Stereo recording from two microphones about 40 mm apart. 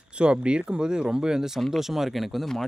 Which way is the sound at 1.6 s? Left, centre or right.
Centre.